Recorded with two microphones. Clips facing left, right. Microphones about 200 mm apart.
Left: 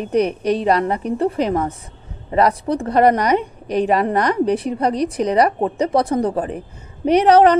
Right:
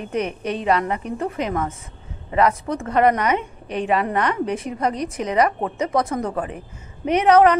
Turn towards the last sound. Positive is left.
turn(degrees=35)  # may be behind; listen again after turning